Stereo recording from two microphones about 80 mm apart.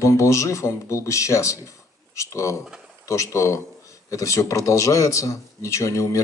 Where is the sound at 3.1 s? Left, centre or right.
Left.